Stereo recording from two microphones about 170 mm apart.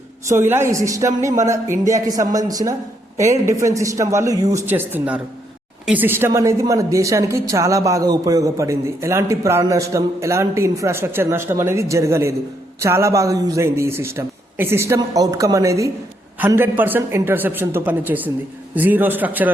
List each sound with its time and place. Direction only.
0.3 s a woman's voice: 15° right (ahead or behind)